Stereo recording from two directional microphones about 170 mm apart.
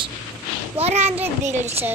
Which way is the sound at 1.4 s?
40° right (ahead or behind).